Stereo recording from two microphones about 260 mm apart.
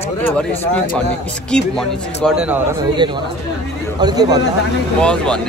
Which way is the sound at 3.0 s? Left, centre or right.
Centre.